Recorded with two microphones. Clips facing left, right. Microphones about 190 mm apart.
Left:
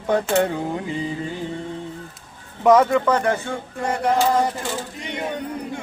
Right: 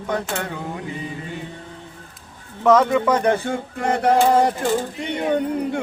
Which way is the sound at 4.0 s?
60° right (ahead or behind).